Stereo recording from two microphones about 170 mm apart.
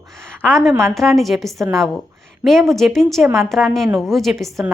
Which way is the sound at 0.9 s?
Centre (ahead or behind).